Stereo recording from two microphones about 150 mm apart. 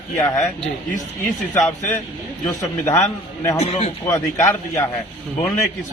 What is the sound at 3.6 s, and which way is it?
Speech, 45° left (ahead or behind).